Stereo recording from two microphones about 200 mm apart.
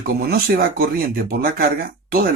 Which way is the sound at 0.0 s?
50° right (ahead or behind).